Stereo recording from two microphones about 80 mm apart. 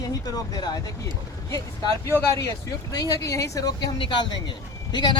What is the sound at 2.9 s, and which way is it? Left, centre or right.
Speech, left.